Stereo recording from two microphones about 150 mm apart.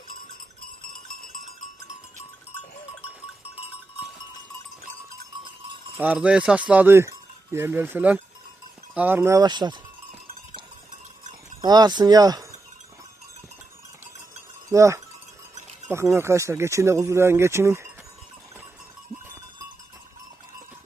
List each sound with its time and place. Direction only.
0.6 s cowbell: 70° left (ahead or behind)
6.0 s speech: 10° right (ahead or behind); by 9.8 s 30° right (ahead or behind)
11.6 s speech: 25° right (ahead or behind)
14.7 s cowbell: 20° right (ahead or behind)
15.9 s speech: 15° right (ahead or behind)